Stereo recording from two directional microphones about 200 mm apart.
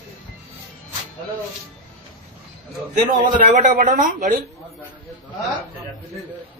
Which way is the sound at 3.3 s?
40° right (ahead or behind).